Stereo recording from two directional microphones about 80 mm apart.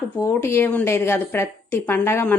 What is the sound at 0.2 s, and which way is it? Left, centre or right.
A woman's voice, left.